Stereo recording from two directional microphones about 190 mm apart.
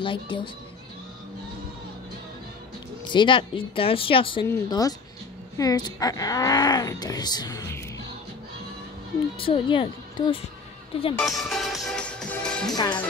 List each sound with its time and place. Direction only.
0.0 s speech: 25° left (ahead or behind)
3.1 s speech: 25° left (ahead or behind)
9.4 s speech: 30° left (ahead or behind)
11.1 s speech: centre (ahead or behind)
12.6 s speech: 20° left (ahead or behind)